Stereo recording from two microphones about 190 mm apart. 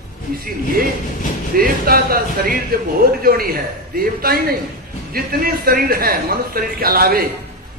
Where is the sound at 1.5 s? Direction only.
50° right (ahead or behind).